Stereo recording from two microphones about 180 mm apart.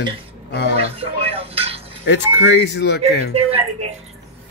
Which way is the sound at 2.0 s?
80° left.